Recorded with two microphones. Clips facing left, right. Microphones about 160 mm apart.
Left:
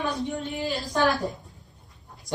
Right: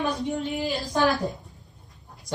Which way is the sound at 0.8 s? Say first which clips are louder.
Even; centre (ahead or behind).